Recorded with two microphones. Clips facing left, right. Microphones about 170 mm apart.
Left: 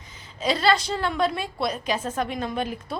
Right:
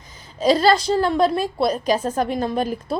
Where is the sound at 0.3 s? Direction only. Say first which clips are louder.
Right 6 dB; 40° right (ahead or behind).